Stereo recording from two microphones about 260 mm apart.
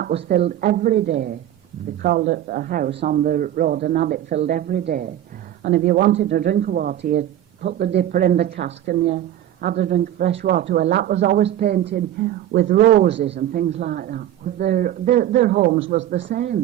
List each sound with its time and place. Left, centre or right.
0.0 s speech: right